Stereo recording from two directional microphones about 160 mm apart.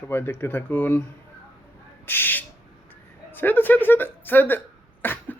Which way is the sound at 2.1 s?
10° left (ahead or behind).